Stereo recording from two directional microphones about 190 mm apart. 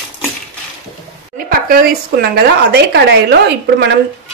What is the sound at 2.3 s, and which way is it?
Speech, 60° right (ahead or behind).